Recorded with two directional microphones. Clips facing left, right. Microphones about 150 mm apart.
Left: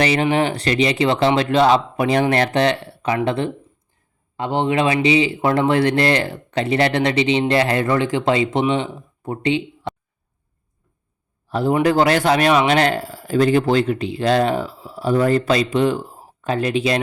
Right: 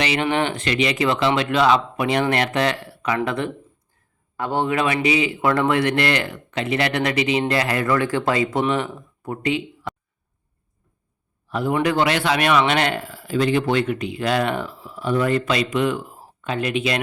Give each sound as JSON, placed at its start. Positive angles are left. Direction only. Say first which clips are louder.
{"t": 0.0, "sound": "a man's voice", "louder": "left 4 dB", "side_deg": 40}
{"t": 11.4, "sound": "a man's voice", "louder": "left 4 dB", "side_deg": 30}